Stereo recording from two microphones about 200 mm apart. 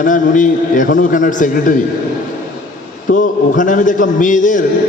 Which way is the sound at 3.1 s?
40° left (ahead or behind).